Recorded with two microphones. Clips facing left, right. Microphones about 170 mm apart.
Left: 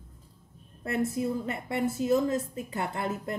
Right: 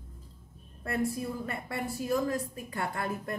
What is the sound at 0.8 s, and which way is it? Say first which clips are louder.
A woman's voice: left 3 dB; 20° left (ahead or behind).